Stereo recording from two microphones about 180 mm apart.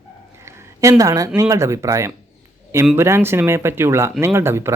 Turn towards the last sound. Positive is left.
turn(degrees=-15)  # may be behind; listen again after turning